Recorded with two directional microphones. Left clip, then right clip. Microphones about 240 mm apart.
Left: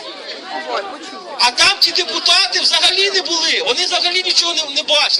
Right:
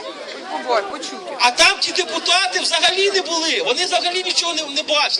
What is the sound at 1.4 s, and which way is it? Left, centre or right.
A man's voice, centre.